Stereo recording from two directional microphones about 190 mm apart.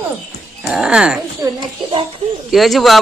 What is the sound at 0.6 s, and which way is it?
Speech, 5° right (ahead or behind).